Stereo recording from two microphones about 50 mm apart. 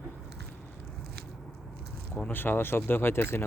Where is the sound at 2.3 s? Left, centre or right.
Left.